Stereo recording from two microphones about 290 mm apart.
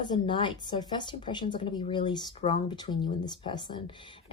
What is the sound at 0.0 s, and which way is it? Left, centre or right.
Speech, centre.